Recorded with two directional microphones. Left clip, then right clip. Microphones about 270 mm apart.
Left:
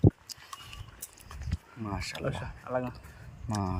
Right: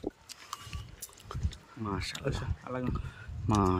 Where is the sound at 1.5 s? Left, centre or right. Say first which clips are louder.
Even; centre.